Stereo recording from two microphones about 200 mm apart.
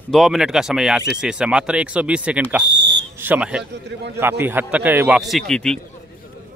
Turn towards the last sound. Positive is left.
turn(degrees=5)  # may be behind; listen again after turning